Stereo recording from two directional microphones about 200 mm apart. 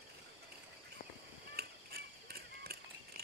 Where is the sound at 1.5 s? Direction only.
50° right (ahead or behind).